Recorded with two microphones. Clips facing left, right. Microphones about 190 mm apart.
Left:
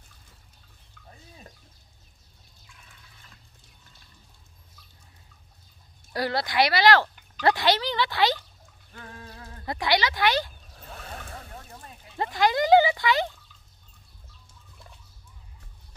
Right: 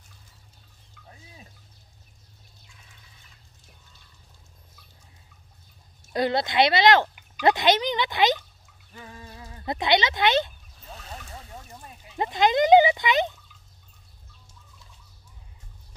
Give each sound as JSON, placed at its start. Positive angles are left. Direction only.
{"t": 6.1, "sound": "speech", "side_deg": -20}
{"t": 8.9, "sound": "a sound", "side_deg": -10}
{"t": 9.7, "sound": "speech", "side_deg": -20}
{"t": 12.2, "sound": "speech", "side_deg": -20}